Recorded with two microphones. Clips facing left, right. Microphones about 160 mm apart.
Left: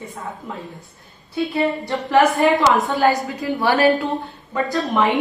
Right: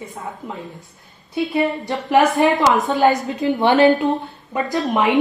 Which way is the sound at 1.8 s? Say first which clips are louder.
Even; 20° right (ahead or behind).